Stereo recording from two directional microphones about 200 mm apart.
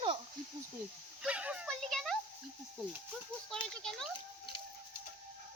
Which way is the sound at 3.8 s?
Centre (ahead or behind).